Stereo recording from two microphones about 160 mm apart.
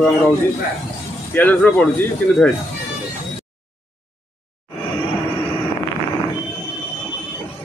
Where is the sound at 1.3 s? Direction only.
10° left (ahead or behind).